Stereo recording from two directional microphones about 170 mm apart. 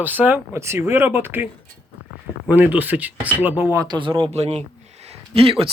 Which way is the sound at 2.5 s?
10° right (ahead or behind).